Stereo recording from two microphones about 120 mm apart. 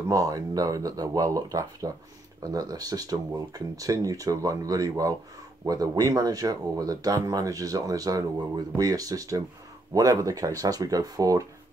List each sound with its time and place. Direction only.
0.1 s speech: 30° right (ahead or behind)